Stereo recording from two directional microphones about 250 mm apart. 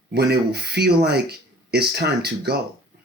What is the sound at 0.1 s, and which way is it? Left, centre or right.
Speech, right.